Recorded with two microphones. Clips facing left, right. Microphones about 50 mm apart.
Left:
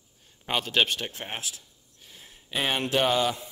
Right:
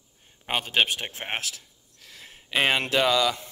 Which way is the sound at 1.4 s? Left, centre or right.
Right.